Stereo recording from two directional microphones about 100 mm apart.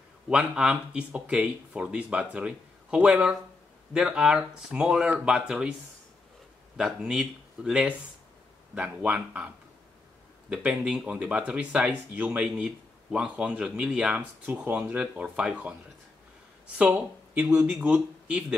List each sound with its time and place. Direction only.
0.3 s speech: 10° right (ahead or behind)
6.8 s speech: 5° right (ahead or behind)
10.5 s speech: 10° right (ahead or behind)
16.7 s speech: 15° right (ahead or behind)